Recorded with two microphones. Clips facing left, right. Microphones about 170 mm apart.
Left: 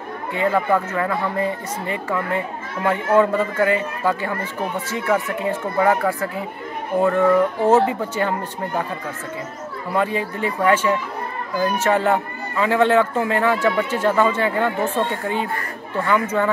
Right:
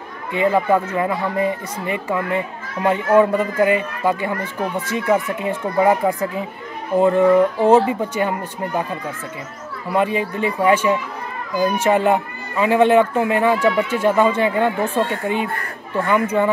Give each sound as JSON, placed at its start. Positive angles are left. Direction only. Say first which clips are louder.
{"t": 0.3, "sound": "speech", "louder": "right 3 dB", "side_deg": -15}
{"t": 9.9, "sound": "speech", "louder": "right 3 dB", "side_deg": -20}